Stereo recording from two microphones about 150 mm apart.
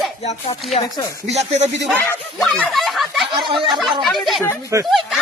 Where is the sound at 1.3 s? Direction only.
50° right (ahead or behind).